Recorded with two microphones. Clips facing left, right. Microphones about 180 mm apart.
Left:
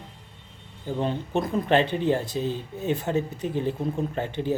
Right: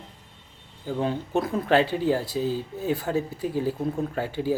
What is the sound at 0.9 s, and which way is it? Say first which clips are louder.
Speech: right 1 dB; 10° right (ahead or behind).